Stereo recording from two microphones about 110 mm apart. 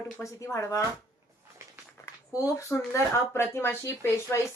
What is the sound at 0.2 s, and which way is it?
Speech, 25° left (ahead or behind).